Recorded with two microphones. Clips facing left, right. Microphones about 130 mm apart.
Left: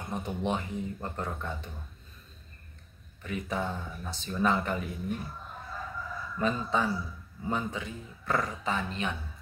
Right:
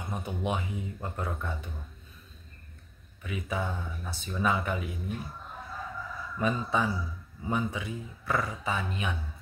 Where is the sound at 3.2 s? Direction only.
5° right (ahead or behind).